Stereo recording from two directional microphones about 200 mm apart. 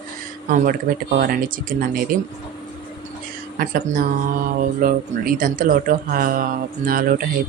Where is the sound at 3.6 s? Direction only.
40° right (ahead or behind).